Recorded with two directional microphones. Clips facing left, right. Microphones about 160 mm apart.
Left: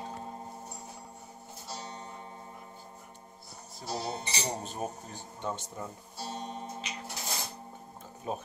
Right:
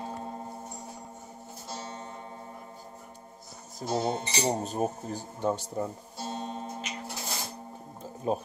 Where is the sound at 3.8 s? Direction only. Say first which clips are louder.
Right 7 dB; 45° right (ahead or behind).